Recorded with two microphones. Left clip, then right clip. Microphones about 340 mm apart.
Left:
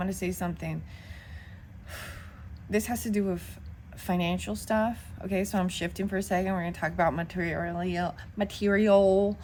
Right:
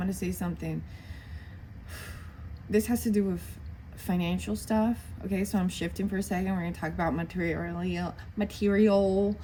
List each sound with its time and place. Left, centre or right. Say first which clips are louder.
0.0 s a woman's voice: left 3 dB; centre
1.9 s gasp: left 3 dB; centre
2.6 s a woman's voice: right 2 dB; centre